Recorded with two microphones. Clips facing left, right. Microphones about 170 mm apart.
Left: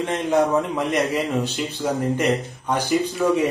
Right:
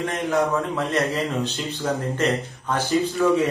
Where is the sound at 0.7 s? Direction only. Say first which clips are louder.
Left 2 dB; 15° left (ahead or behind).